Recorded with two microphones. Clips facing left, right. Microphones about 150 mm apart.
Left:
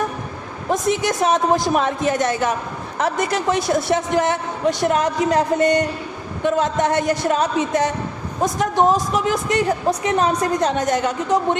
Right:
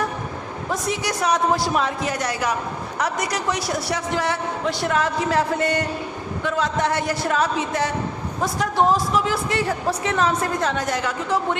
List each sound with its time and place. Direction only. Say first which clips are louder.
0.7 s a woman's voice: left 6 dB; 20° left (ahead or behind)